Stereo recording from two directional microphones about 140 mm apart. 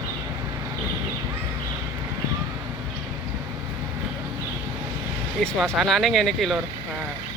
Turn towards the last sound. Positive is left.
turn(degrees=0)  # may be behind; listen again after turning